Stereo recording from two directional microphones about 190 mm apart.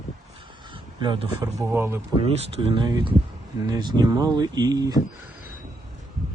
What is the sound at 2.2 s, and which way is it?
A man's voice, 30° right (ahead or behind).